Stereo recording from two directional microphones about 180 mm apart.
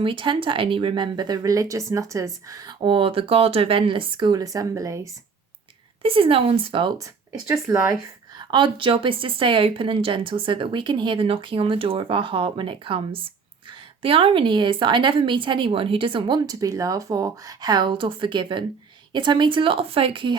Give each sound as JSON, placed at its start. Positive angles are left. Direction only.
{"t": 0.0, "sound": "speech", "side_deg": -30}
{"t": 6.0, "sound": "speech", "side_deg": -30}
{"t": 7.7, "sound": "speech", "side_deg": -20}